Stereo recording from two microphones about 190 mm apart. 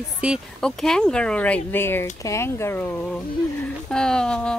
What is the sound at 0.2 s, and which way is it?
Speech, centre (ahead or behind).